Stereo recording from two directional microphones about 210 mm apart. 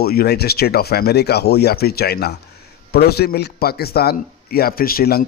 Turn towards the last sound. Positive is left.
turn(degrees=45)  # may be behind; listen again after turning